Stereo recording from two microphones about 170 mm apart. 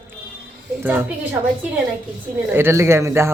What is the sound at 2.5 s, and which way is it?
Speech, 15° right (ahead or behind).